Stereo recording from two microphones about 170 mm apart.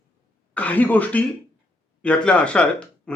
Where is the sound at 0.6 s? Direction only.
10° left (ahead or behind).